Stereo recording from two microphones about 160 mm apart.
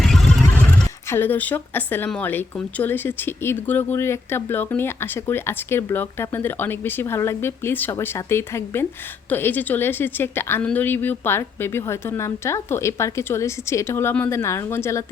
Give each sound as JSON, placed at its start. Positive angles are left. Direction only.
{"t": 0.0, "sound": "neigh", "side_deg": 0}
{"t": 1.1, "sound": "speech", "side_deg": 10}